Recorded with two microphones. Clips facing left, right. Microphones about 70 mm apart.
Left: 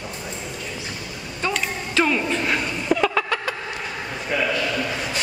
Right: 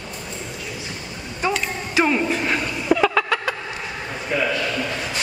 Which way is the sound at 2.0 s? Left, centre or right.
Centre.